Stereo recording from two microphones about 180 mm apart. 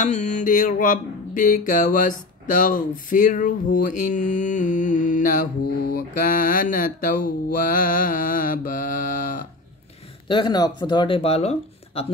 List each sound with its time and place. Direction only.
0.0 s music: 40° left (ahead or behind)
10.2 s speech: 25° left (ahead or behind)